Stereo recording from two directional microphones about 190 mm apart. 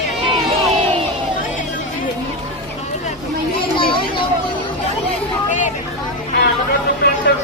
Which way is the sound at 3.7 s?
25° left (ahead or behind).